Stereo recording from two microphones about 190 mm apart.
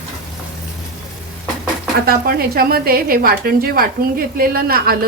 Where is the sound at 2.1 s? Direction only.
50° right (ahead or behind).